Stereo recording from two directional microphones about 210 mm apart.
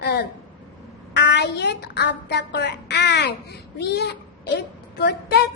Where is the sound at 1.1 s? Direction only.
55° left (ahead or behind).